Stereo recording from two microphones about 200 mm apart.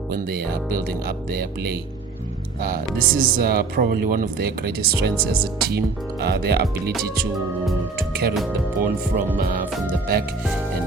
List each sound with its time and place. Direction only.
0.1 s speech: 50° right (ahead or behind)
7.3 s speech: centre (ahead or behind)
7.9 s speech: 50° right (ahead or behind)
8.3 s speech: 5° right (ahead or behind)